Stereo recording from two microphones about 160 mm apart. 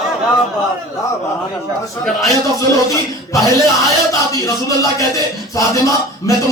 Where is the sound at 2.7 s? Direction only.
20° left (ahead or behind).